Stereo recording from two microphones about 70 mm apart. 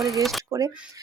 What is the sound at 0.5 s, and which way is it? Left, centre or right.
Speech, right.